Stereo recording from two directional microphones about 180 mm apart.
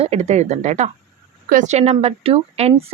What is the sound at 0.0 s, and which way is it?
A woman's voice, 35° right (ahead or behind).